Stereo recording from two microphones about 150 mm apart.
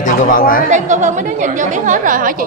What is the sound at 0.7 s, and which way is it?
Speech, 55° right (ahead or behind).